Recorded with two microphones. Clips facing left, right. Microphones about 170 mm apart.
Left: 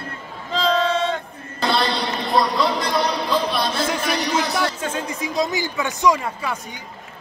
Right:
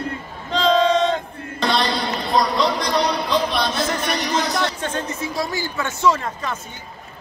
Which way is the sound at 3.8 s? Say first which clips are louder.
Left 1 dB; 10° left (ahead or behind).